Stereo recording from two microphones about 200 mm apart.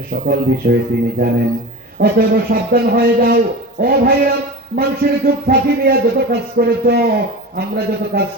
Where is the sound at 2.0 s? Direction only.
50° right (ahead or behind).